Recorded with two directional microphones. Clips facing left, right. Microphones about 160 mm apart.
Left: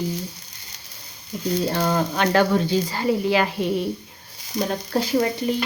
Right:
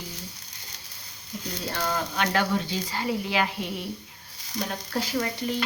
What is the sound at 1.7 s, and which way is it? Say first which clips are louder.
A woman's voice: left 7 dB; 35° left (ahead or behind).